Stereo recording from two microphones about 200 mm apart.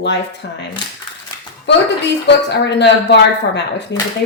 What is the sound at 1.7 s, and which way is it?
A woman's voice, 60° left (ahead or behind).